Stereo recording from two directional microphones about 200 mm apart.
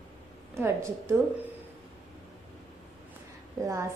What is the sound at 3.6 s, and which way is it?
Speech, 15° right (ahead or behind).